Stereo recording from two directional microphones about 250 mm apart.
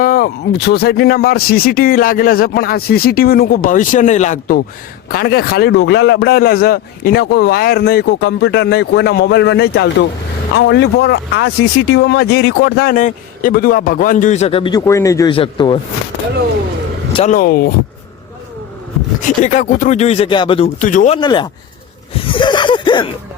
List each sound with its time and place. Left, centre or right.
0.0 s a man's voice: left; by 15.8 s centre
17.1 s speech: left
17.3 s a man's voice: left
19.2 s speech: left
20.8 s a man's voice: left
21.2 s speech: centre
22.1 s a sound: left